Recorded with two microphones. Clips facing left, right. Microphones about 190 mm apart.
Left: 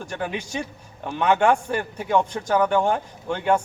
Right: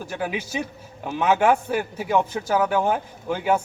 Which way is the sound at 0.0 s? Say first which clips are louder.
Right 1 dB; 5° right (ahead or behind).